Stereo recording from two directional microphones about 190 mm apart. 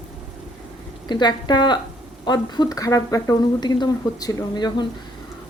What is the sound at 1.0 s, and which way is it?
Speech, 20° left (ahead or behind).